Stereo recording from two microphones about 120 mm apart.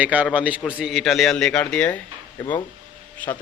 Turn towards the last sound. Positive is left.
turn(degrees=10)  # may be behind; listen again after turning